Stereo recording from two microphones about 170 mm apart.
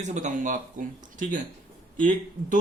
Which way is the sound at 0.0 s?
45° right (ahead or behind).